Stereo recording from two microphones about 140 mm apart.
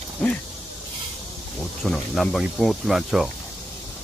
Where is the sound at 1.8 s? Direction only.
Centre (ahead or behind).